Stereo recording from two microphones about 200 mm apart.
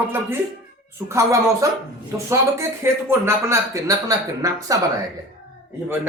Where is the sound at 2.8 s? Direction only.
10° right (ahead or behind).